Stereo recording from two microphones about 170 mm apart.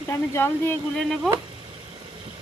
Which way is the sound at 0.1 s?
15° left (ahead or behind).